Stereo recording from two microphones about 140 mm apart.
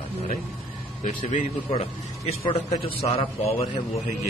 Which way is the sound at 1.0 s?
55° left (ahead or behind).